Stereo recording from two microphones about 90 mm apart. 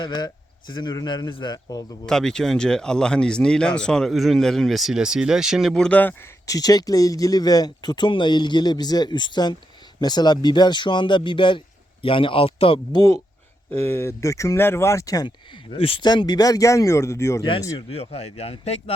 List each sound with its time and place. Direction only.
0.0 s speech: 55° left (ahead or behind)
2.0 s speech: 5° left (ahead or behind)
6.4 s speech: 40° left (ahead or behind); by 12.8 s 90° left
12.9 s speech: 45° left (ahead or behind)
13.7 s speech: 25° left (ahead or behind); by 15.3 s 40° left (ahead or behind)
15.7 s speech: 90° left
16.0 s speech: 50° left (ahead or behind); by 17.4 s 30° left (ahead or behind)
17.7 s speech: 90° left